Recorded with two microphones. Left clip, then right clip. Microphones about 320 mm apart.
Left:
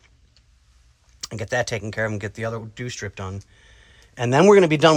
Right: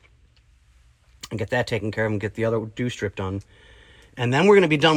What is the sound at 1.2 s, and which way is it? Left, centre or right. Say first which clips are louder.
Speech: even; centre.